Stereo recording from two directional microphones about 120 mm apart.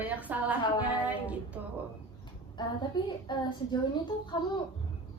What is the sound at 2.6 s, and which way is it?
A woman's voice, 40° left (ahead or behind).